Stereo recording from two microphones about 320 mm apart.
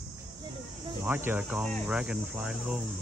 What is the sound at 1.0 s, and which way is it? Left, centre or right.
Speech, centre.